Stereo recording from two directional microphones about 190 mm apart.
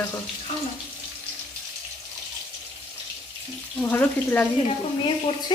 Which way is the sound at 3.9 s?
10° left (ahead or behind).